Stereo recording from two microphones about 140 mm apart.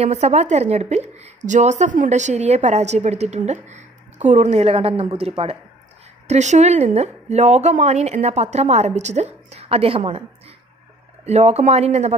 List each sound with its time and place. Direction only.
0.0 s a woman's voice: 50° right (ahead or behind)
6.2 s a woman's voice: 55° right (ahead or behind)
11.2 s a woman's voice: 50° right (ahead or behind)